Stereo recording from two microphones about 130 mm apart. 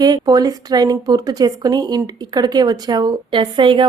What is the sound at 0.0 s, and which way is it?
Speech, 30° right (ahead or behind).